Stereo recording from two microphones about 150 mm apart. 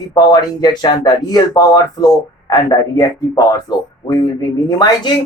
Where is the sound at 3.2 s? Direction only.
25° left (ahead or behind).